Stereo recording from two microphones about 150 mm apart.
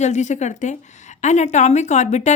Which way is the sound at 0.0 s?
50° left (ahead or behind).